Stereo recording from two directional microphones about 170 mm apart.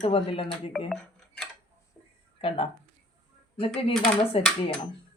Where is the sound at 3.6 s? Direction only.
35° left (ahead or behind).